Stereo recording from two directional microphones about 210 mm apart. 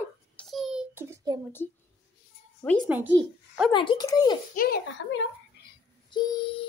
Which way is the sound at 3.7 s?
20° left (ahead or behind).